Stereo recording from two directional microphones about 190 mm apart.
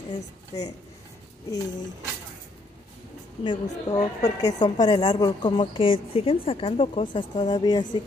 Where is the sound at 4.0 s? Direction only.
35° left (ahead or behind).